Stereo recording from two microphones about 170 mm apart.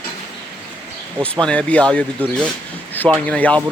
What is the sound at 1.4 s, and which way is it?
Speech, 5° left (ahead or behind).